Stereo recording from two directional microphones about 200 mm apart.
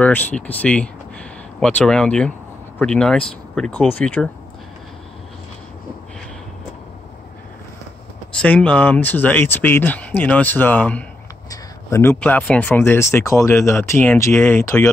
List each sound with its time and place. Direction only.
0.0 s speech: 10° left (ahead or behind)
8.4 s speech: 5° left (ahead or behind)